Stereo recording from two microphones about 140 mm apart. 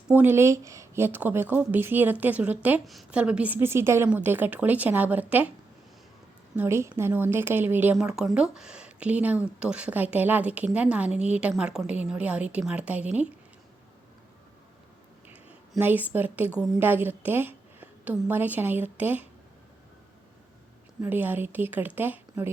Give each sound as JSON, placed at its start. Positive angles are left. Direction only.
{"t": 0.1, "sound": "a woman's voice", "side_deg": -15}
{"t": 6.6, "sound": "a woman's voice", "side_deg": -20}
{"t": 15.3, "sound": "a woman's voice", "side_deg": -10}
{"t": 21.0, "sound": "a woman's voice", "side_deg": -15}